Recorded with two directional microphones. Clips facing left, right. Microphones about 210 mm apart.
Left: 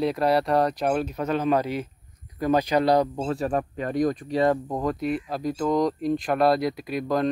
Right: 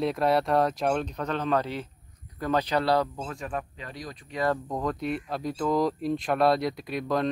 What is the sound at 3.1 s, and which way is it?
Speech, 35° left (ahead or behind).